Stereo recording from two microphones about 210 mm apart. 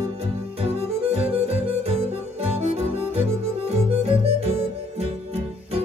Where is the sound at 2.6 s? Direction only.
30° right (ahead or behind).